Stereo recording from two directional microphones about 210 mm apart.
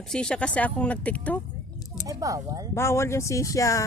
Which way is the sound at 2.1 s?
15° right (ahead or behind).